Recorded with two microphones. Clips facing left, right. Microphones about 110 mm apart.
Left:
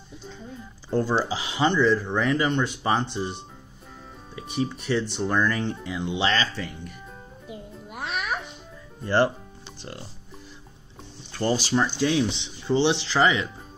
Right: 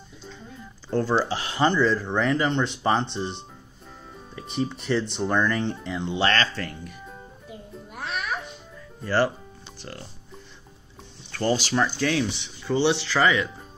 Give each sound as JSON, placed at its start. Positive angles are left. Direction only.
{"t": 0.8, "sound": "speech", "side_deg": 15}
{"t": 7.9, "sound": "music", "side_deg": 10}
{"t": 9.0, "sound": "speech", "side_deg": 20}
{"t": 11.6, "sound": "speech", "side_deg": 15}